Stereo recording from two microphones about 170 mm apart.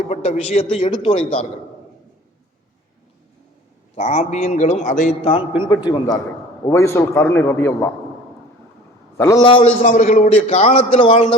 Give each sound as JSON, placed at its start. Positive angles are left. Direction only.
{"t": 0.1, "sound": "a man's voice", "side_deg": 40}
{"t": 3.9, "sound": "a man's voice", "side_deg": 45}
{"t": 5.2, "sound": "a man's voice", "side_deg": 30}
{"t": 9.1, "sound": "a man's voice", "side_deg": 15}
{"t": 9.4, "sound": "a man's voice", "side_deg": 30}
{"t": 9.8, "sound": "a man's voice", "side_deg": 45}